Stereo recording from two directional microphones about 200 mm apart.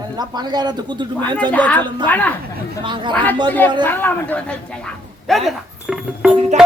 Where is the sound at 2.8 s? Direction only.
25° right (ahead or behind).